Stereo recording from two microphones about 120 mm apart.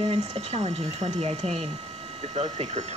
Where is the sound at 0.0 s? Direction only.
55° right (ahead or behind).